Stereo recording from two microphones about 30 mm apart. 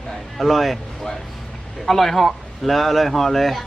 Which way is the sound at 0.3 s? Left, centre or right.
Centre.